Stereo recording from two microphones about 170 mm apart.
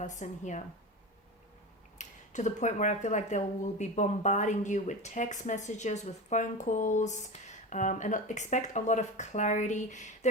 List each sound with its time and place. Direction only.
0.0 s speech: 45° left (ahead or behind)
2.0 s speech: 45° left (ahead or behind)